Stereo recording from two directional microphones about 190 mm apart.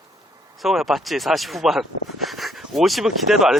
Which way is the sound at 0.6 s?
Centre (ahead or behind).